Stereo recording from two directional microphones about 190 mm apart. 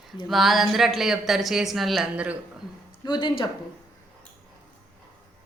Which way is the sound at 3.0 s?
25° left (ahead or behind).